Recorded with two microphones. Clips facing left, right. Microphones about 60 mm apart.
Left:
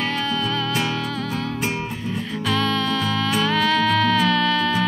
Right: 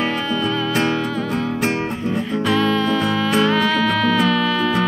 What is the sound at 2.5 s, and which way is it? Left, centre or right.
Music, centre.